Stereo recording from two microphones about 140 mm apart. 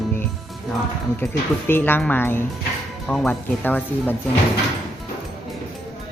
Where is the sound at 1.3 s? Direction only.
15° left (ahead or behind).